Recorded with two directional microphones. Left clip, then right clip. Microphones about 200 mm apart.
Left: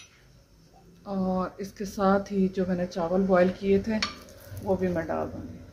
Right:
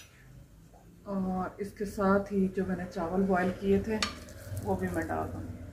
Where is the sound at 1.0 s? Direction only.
50° left (ahead or behind).